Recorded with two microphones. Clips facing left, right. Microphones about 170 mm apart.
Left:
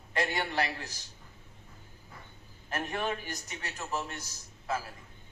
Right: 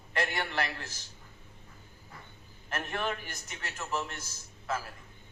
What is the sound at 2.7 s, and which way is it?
Speech, 15° left (ahead or behind).